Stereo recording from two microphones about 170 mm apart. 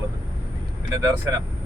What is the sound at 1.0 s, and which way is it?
Speech, 10° right (ahead or behind).